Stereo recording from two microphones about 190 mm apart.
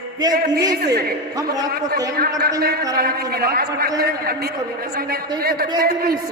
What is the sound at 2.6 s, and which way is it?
A man's voice, 55° right (ahead or behind).